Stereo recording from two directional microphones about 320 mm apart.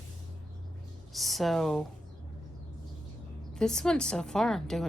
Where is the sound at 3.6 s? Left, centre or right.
Centre.